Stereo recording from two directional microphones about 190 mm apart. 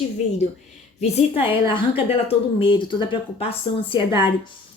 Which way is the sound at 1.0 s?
30° left (ahead or behind).